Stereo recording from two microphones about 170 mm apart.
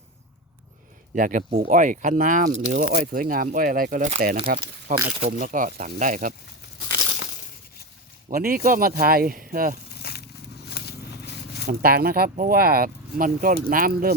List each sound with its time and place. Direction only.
1.1 s speech: 50° right (ahead or behind)
8.3 s speech: 60° right (ahead or behind)
9.9 s a sound: 70° left (ahead or behind)
10.8 s walk: 75° left (ahead or behind)
11.7 s speech: 60° right (ahead or behind)